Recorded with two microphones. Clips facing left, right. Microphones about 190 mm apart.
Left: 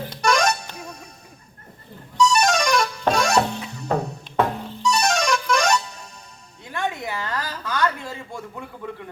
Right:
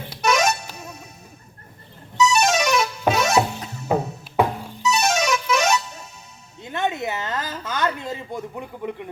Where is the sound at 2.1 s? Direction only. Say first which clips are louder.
Even; 5° right (ahead or behind).